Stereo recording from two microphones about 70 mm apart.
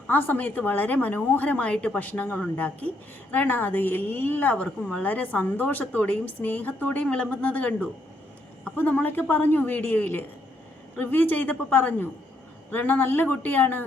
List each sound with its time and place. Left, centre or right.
0.1 s a woman's voice: left